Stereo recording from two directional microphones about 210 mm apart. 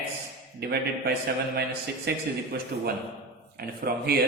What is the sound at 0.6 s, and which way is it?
Speech, 50° right (ahead or behind).